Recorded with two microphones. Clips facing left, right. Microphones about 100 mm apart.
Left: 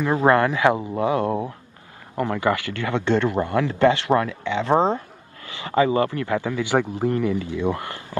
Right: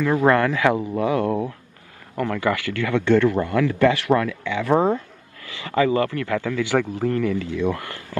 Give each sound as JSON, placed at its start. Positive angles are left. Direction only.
{"t": 0.0, "sound": "a man's voice", "side_deg": 20}